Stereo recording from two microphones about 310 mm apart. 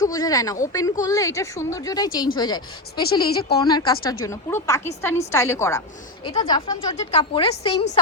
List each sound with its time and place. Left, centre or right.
0.0 s speech: centre